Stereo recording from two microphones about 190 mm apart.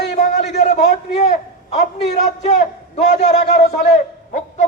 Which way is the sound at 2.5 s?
40° left (ahead or behind).